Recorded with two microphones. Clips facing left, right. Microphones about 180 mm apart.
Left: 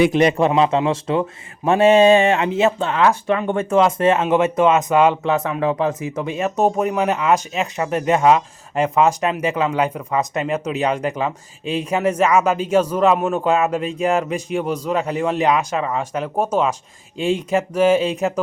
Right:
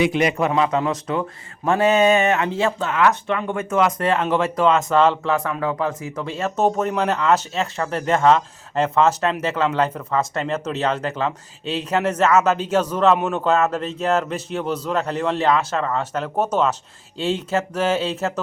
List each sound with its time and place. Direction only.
0.2 s a man's voice: 30° left (ahead or behind); by 18.3 s 15° left (ahead or behind)